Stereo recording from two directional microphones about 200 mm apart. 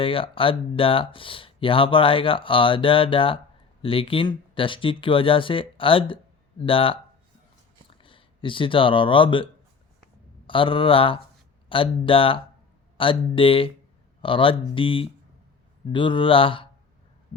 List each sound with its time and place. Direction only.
0.0 s speech: 25° left (ahead or behind)